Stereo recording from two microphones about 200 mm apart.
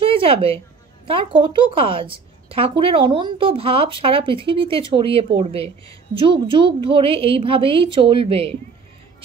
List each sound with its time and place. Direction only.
0.0 s a woman's voice: 25° right (ahead or behind)